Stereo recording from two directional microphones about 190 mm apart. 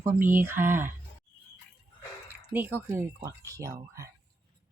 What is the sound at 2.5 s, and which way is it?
Speech, 10° right (ahead or behind).